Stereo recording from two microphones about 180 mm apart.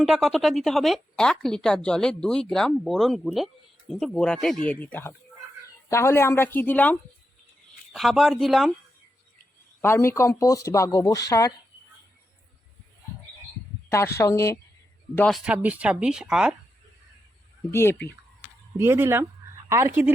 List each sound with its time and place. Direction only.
0.0 s a woman's voice: centre (ahead or behind)
7.9 s a woman's voice: centre (ahead or behind)
9.8 s speech: 15° left (ahead or behind)
14.2 s speech: 15° left (ahead or behind)
15.4 s a woman's voice: 10° right (ahead or behind)
17.7 s speech: 15° left (ahead or behind)
18.8 s speech: 15° right (ahead or behind)